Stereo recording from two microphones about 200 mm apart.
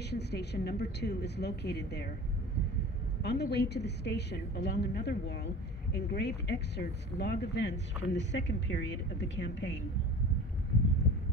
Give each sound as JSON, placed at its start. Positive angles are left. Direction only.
{"t": 0.1, "sound": "speech", "side_deg": 55}
{"t": 3.2, "sound": "speech", "side_deg": 55}